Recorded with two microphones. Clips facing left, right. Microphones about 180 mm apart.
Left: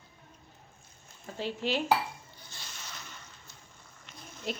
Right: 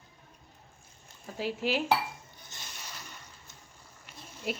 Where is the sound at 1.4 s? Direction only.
10° right (ahead or behind).